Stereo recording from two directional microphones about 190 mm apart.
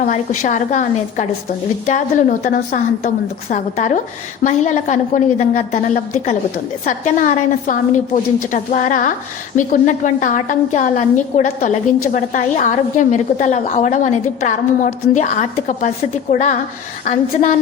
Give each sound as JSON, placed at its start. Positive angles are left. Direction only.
{"t": 0.0, "sound": "a woman's voice", "side_deg": 40}
{"t": 2.4, "sound": "a woman's voice", "side_deg": 35}